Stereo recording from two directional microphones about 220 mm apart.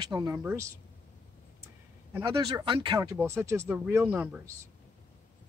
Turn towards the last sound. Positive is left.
turn(degrees=-10)  # may be behind; listen again after turning